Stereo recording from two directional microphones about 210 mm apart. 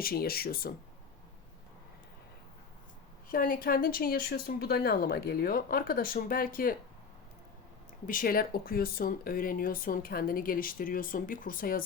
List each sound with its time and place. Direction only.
0.0 s speech: 45° left (ahead or behind)
3.2 s speech: 40° left (ahead or behind)
8.0 s speech: 40° left (ahead or behind)